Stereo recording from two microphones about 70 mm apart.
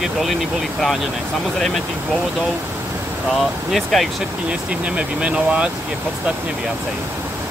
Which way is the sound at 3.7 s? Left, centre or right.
Centre.